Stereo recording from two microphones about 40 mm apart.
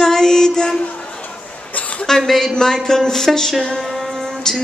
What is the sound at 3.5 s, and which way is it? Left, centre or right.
Music, centre.